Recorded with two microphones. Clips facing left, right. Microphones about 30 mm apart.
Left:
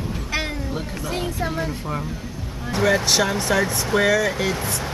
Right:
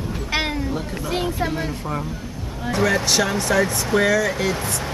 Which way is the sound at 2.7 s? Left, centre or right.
Centre.